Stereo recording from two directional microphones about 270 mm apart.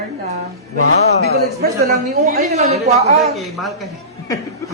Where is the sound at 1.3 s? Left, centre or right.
Right.